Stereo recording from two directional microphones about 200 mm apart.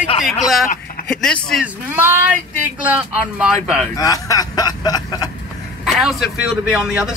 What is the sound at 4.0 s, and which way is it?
Speech, 20° left (ahead or behind).